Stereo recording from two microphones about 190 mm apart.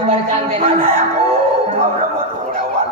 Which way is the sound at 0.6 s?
30° right (ahead or behind).